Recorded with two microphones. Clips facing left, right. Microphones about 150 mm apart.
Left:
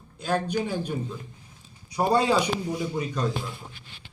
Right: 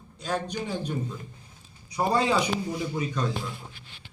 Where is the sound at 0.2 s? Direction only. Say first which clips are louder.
Left 4 dB; 5° left (ahead or behind).